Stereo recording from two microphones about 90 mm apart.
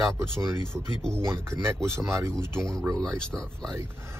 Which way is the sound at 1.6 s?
30° right (ahead or behind).